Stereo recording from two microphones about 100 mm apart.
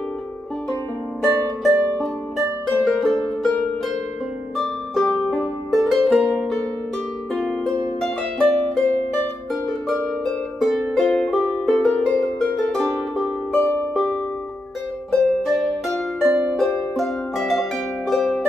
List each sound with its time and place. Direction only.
1.7 s music: 30° right (ahead or behind)
2.0 s music: centre (ahead or behind)
4.6 s music: centre (ahead or behind)
7.3 s harp: 5° left (ahead or behind)
10.2 s music: centre (ahead or behind)
15.0 s harp: centre (ahead or behind)